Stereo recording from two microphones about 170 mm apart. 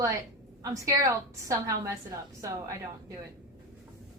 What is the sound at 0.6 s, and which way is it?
A woman's voice, 20° right (ahead or behind).